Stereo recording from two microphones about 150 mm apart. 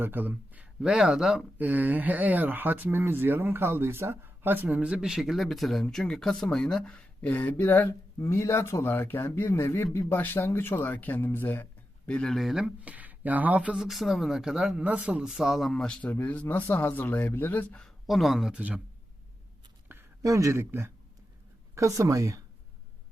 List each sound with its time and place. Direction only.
0.0 s speech: 15° right (ahead or behind)
19.9 s speech: 20° right (ahead or behind)